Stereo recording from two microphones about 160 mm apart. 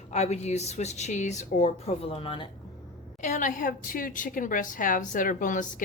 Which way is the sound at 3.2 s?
50° left (ahead or behind).